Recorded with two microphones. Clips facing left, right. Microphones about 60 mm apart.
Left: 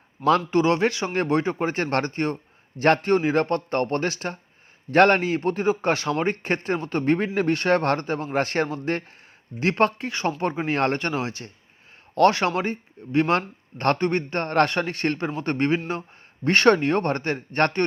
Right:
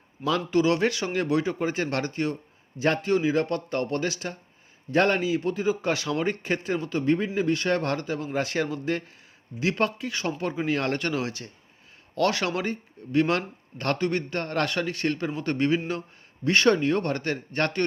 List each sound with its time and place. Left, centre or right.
0.3 s a man's voice: left
1.1 s a man's voice: left
4.9 s a man's voice: left
6.8 s a man's voice: left
15.9 s a sound: left
16.5 s a man's voice: left
17.0 s a man's voice: left